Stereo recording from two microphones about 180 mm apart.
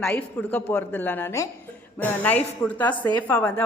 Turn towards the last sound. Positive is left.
turn(degrees=10)  # may be behind; listen again after turning